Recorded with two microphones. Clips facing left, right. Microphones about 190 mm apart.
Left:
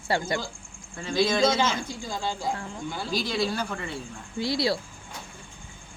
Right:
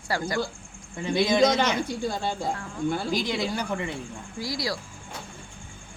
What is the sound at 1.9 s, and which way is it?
Speech, 60° right (ahead or behind).